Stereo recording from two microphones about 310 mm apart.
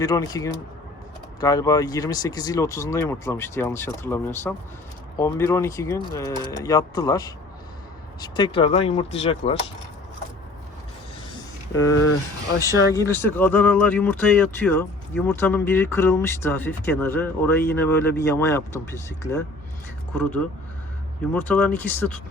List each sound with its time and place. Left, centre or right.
0.0 s speech: centre
11.8 s speech: centre
21.3 s speech: centre